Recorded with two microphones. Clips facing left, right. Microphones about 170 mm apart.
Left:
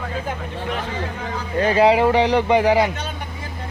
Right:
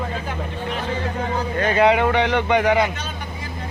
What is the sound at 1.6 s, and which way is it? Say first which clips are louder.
Speech: left 2 dB; 30° left (ahead or behind).